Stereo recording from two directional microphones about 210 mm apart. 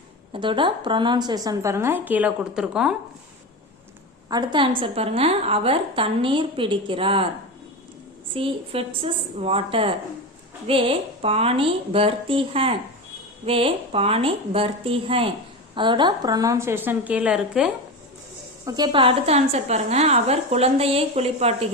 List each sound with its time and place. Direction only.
0.3 s a woman's voice: 25° right (ahead or behind); by 2.9 s 5° right (ahead or behind)
4.3 s a woman's voice: 20° right (ahead or behind)
8.3 s a woman's voice: 25° right (ahead or behind); by 17.7 s 5° right (ahead or behind)
18.6 s a woman's voice: 20° right (ahead or behind)